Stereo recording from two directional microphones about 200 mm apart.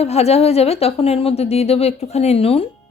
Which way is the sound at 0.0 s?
30° left (ahead or behind).